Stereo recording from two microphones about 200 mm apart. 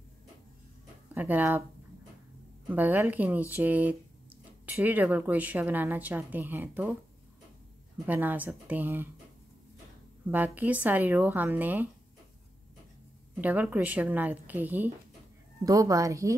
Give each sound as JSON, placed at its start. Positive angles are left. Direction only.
{"t": 1.1, "sound": "speech", "side_deg": -10}
{"t": 2.7, "sound": "speech", "side_deg": -10}
{"t": 8.1, "sound": "speech", "side_deg": -10}
{"t": 10.2, "sound": "speech", "side_deg": -10}
{"t": 13.4, "sound": "speech", "side_deg": -10}